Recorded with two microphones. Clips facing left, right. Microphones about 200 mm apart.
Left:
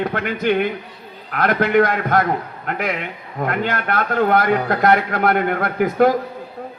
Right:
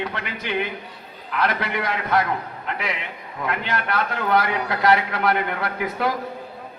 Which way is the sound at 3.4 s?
45° left (ahead or behind).